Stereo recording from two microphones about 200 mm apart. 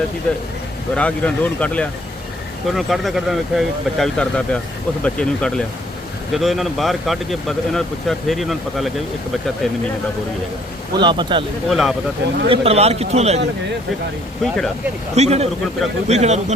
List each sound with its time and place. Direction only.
0.9 s speech: 5° left (ahead or behind)
10.9 s speech: 25° right (ahead or behind)
11.7 s speech: centre (ahead or behind)
12.5 s a man's voice: 30° right (ahead or behind)
14.4 s speech: centre (ahead or behind)
15.1 s a man's voice: 30° right (ahead or behind)